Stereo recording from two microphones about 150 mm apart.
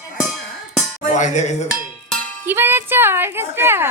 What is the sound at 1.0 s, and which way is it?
Speech, 55° left (ahead or behind).